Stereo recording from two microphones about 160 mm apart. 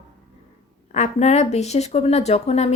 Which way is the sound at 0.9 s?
45° left (ahead or behind).